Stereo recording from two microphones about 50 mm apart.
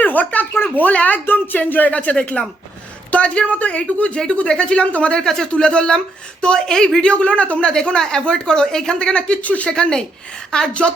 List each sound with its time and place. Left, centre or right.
0.0 s a sound: left
0.7 s a woman's voice: left
9.7 s speech: centre